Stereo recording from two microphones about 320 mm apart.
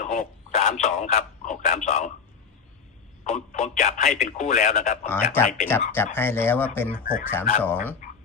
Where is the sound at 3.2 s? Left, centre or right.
Left.